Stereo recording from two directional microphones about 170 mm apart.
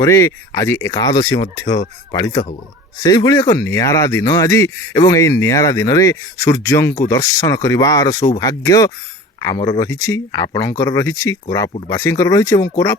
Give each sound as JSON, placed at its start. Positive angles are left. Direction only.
{"t": 0.0, "sound": "speech", "side_deg": 20}